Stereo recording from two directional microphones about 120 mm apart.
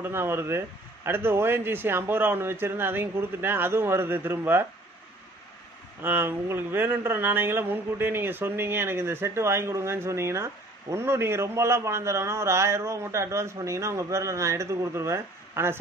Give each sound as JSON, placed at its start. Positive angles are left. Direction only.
{"t": 0.0, "sound": "speech", "side_deg": -20}
{"t": 6.0, "sound": "speech", "side_deg": -15}